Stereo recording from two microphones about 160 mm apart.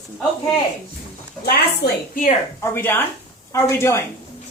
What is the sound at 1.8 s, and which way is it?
Speech, 90° left.